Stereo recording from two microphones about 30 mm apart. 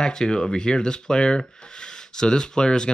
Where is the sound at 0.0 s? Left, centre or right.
Left.